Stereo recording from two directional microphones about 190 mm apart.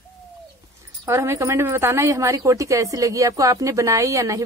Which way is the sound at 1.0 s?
15° right (ahead or behind).